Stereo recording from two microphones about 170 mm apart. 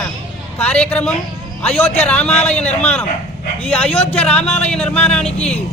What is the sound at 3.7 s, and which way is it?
Speech, 35° left (ahead or behind).